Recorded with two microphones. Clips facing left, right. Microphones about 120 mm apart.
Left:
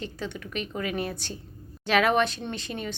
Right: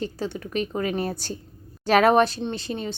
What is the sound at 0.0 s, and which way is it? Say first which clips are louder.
A woman's voice: right 5 dB; 35° right (ahead or behind).